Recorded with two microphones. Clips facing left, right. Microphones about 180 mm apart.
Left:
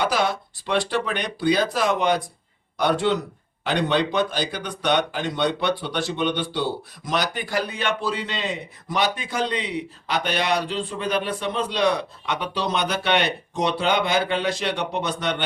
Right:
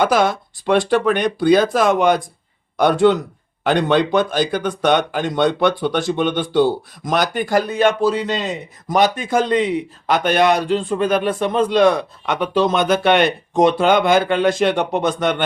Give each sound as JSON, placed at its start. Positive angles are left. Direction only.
{"t": 0.0, "sound": "speech", "side_deg": -50}